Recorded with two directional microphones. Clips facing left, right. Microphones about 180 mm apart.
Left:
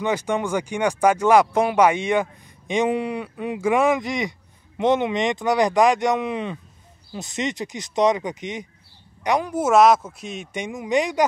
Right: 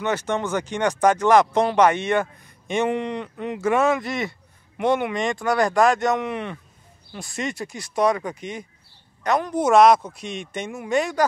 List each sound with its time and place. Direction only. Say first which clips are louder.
0.0 s speech: left 1 dB; 10° left (ahead or behind)